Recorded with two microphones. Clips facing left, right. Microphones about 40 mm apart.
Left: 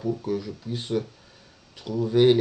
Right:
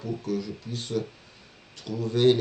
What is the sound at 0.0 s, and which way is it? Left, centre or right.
Mantra, centre.